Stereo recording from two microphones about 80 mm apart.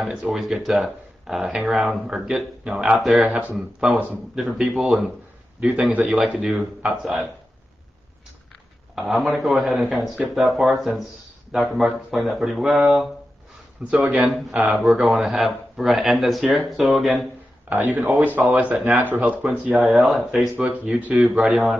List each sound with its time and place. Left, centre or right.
0.0 s speech: centre
5.9 s a man's voice: centre
6.5 s speech: right
8.9 s speech: centre
13.8 s speech: centre
14.7 s speech: centre
17.6 s speech: right
19.8 s speech: centre
20.6 s speech: centre
21.1 s speech: centre